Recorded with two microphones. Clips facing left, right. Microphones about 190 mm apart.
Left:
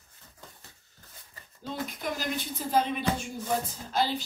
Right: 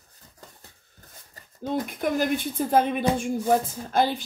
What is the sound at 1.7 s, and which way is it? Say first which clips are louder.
Speech: right 8 dB; 55° right (ahead or behind).